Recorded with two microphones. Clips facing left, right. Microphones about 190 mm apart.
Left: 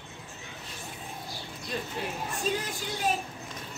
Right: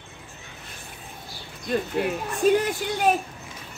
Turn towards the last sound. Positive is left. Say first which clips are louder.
# right 8 dB
turn(degrees=-65)  # may be behind; listen again after turning